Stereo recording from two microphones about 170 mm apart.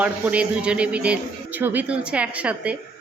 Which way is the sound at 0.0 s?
10° right (ahead or behind).